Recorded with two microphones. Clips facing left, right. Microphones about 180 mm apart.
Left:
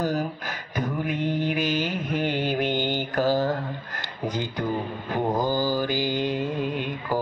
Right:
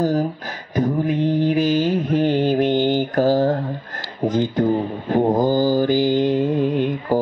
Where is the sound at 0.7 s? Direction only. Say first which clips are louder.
Right 8 dB; 35° right (ahead or behind).